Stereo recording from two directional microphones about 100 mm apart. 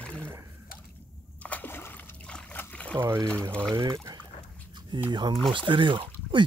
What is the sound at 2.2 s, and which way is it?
Trickle, 10° left (ahead or behind).